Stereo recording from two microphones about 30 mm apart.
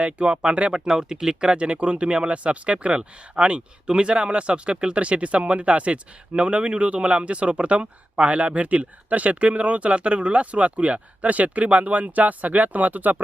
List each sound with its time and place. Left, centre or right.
0.0 s speech: right
0.7 s speech: right
1.5 s speech: right